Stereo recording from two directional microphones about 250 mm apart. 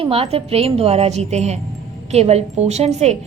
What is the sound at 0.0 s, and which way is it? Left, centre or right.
A woman's voice, right.